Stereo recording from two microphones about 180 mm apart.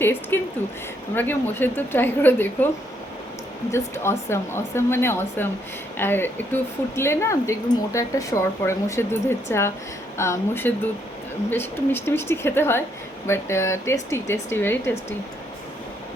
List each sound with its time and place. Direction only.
0.0 s speech: 10° left (ahead or behind)
3.7 s speech: 15° left (ahead or behind)